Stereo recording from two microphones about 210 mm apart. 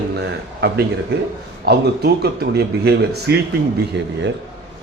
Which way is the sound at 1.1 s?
50° right (ahead or behind).